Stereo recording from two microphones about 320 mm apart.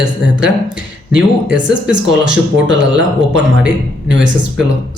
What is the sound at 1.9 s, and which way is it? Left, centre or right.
Speech, right.